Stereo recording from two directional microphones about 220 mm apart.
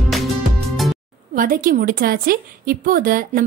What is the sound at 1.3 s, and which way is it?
A woman's voice, 40° right (ahead or behind).